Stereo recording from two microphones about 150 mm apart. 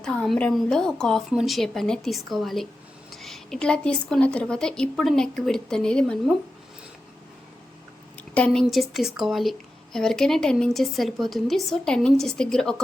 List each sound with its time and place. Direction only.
0.0 s a woman's voice: 5° left (ahead or behind)
8.2 s a woman's voice: 5° left (ahead or behind)